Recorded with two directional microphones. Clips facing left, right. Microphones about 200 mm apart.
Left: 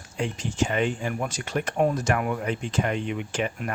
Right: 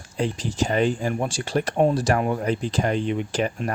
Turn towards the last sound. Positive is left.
turn(degrees=-35)  # may be behind; listen again after turning